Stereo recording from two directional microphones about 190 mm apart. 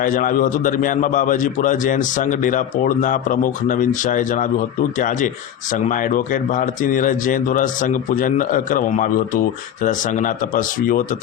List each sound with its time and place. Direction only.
0.0 s a man's voice: 45° left (ahead or behind)